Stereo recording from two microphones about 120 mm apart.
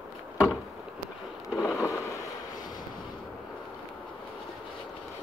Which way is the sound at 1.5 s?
Centre (ahead or behind).